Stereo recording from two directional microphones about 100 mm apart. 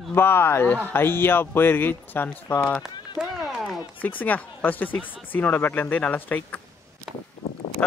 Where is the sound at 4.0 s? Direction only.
15° left (ahead or behind).